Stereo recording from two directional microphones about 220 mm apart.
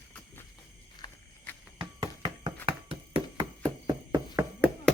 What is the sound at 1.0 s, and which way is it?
Walk, 20° left (ahead or behind).